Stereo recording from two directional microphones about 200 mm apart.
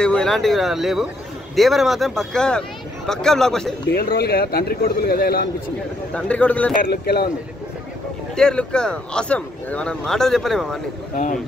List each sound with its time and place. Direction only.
0.0 s speech: 5° left (ahead or behind)
3.9 s a man's voice: 50° left (ahead or behind)
6.1 s speech: 5° left (ahead or behind)
6.8 s a man's voice: 50° left (ahead or behind)
8.4 s speech: 5° left (ahead or behind)